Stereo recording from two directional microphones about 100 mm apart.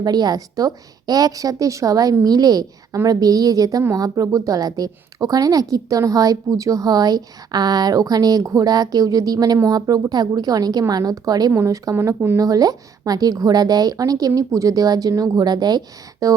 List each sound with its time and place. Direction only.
0.0 s a woman's voice: 40° right (ahead or behind); by 12.4 s 25° right (ahead or behind)
12.4 s a woman's voice: 35° right (ahead or behind)